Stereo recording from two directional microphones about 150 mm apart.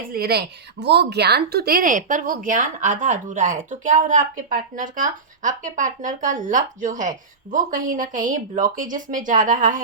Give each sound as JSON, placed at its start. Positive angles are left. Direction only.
{"t": 0.1, "sound": "a woman's voice", "side_deg": -90}